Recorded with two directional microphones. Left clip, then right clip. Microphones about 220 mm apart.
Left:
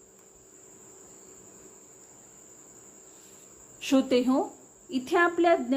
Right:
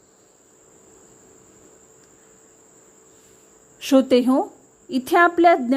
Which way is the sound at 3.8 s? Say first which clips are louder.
Right 8 dB; 35° right (ahead or behind).